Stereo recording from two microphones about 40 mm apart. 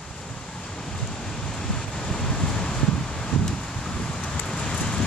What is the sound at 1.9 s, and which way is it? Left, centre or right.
Wind, centre.